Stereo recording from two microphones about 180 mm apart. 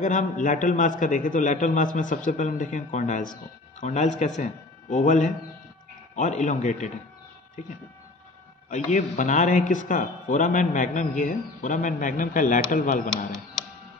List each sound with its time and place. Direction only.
0.0 s a man's voice: 45° left (ahead or behind)
8.6 s speech: 45° left (ahead or behind)